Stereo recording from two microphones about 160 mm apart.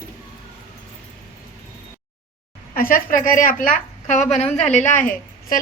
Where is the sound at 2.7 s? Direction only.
65° left (ahead or behind); by 4.5 s 45° left (ahead or behind).